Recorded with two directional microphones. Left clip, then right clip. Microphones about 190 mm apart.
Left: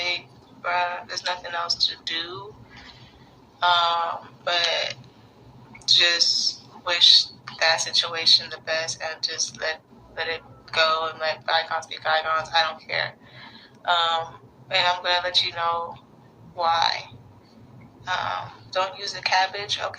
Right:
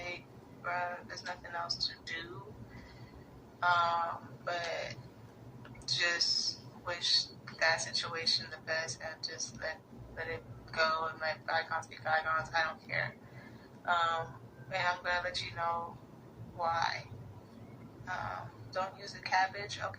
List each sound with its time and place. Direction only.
0.6 s speech: 45° left (ahead or behind)
3.6 s a man's voice: 40° left (ahead or behind)
18.0 s a woman's voice: 45° left (ahead or behind)